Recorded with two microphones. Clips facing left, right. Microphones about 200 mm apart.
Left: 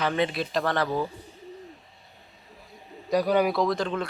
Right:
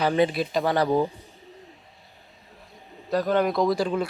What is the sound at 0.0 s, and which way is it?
Speech, 35° right (ahead or behind).